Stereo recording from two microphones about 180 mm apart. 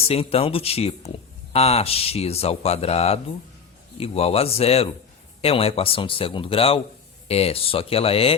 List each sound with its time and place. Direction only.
0.1 s speech: 35° left (ahead or behind)